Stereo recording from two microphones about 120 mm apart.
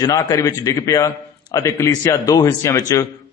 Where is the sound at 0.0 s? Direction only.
30° left (ahead or behind).